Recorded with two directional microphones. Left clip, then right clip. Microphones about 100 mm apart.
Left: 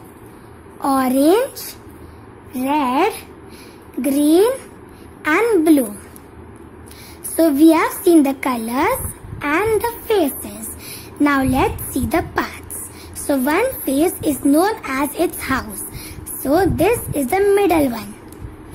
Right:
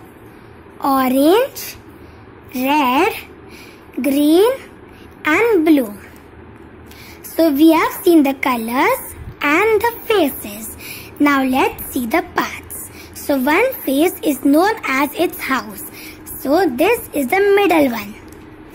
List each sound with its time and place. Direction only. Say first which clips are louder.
0.7 s speech: right 2 dB; centre (ahead or behind)
7.3 s a woman's voice: right 1 dB; 5° left (ahead or behind)